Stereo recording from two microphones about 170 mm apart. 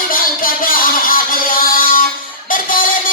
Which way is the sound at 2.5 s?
55° left (ahead or behind).